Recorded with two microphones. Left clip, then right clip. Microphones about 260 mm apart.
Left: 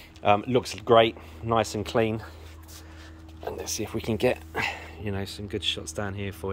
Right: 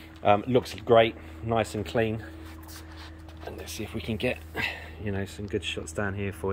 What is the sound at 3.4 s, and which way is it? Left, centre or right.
Speech, centre.